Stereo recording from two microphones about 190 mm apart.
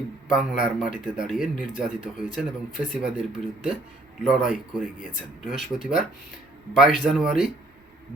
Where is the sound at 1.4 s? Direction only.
45° left (ahead or behind).